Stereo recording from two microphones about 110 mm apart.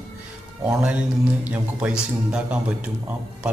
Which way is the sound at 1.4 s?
10° right (ahead or behind).